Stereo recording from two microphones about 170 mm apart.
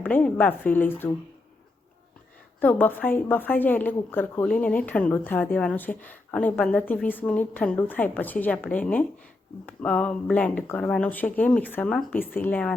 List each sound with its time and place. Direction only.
0.0 s a woman's voice: 10° left (ahead or behind)
2.6 s a woman's voice: 10° left (ahead or behind)